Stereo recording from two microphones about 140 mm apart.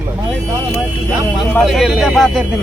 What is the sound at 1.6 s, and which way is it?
Speech, centre (ahead or behind).